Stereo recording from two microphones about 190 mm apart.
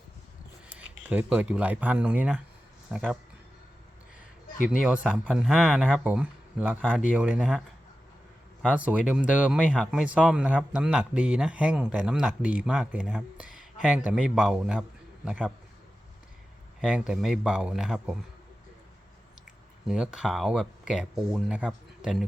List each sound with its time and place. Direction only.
0.7 s a man's voice: 10° right (ahead or behind)
4.5 s speech: 45° left (ahead or behind)
4.8 s a man's voice: 5° right (ahead or behind)
8.6 s a man's voice: 5° right (ahead or behind)
16.8 s a man's voice: 5° right (ahead or behind)
19.9 s a man's voice: centre (ahead or behind)